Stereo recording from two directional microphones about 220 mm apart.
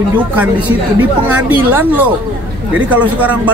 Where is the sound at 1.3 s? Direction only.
10° right (ahead or behind).